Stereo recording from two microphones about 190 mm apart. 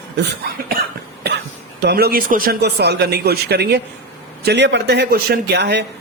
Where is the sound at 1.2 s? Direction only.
60° right (ahead or behind).